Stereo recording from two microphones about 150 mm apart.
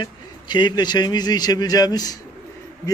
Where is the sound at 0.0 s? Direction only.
30° left (ahead or behind).